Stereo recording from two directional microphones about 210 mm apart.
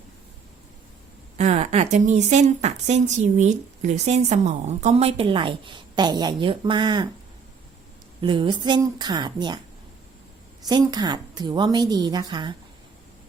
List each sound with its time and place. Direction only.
1.4 s a woman's voice: 35° right (ahead or behind)
8.2 s a woman's voice: 20° right (ahead or behind)
10.7 s a woman's voice: 20° right (ahead or behind)